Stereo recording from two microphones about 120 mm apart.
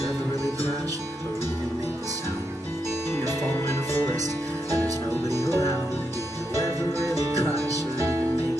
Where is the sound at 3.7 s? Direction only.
20° left (ahead or behind).